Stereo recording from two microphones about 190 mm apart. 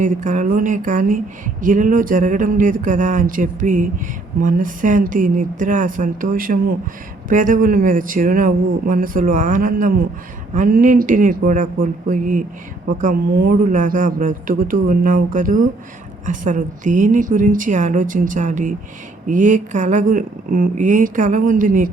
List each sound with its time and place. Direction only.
0.0 s speech: 45° right (ahead or behind)